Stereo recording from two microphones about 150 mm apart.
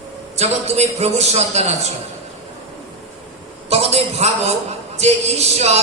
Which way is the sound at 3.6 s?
45° right (ahead or behind).